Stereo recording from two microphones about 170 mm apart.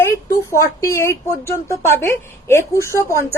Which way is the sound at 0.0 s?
15° left (ahead or behind).